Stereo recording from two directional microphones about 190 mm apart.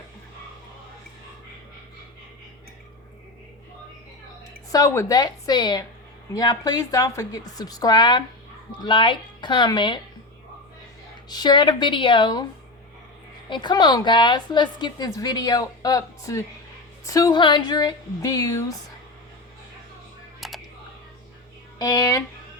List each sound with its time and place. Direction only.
4.7 s a woman's voice: 20° left (ahead or behind)
11.3 s a woman's voice: 20° left (ahead or behind)
13.5 s a woman's voice: 25° left (ahead or behind)
20.4 s typing: centre (ahead or behind)
21.8 s speech: 20° left (ahead or behind)